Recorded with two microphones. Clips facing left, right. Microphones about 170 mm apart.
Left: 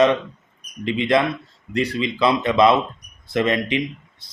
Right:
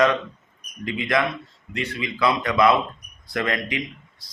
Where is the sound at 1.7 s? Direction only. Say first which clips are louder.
Left 7 dB; 35° left (ahead or behind).